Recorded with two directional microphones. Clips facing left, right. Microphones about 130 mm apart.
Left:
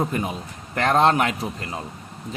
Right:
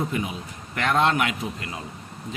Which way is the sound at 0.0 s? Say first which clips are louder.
Left 3 dB; 40° left (ahead or behind).